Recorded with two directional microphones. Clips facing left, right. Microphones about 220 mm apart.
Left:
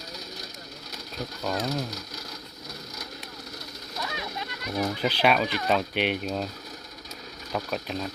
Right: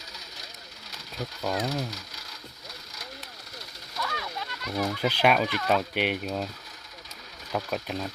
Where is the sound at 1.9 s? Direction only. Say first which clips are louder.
Left 4 dB; 40° left (ahead or behind).